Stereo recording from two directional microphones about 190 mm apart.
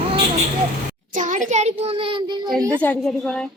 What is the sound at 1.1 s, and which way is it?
A child's voice, 40° right (ahead or behind).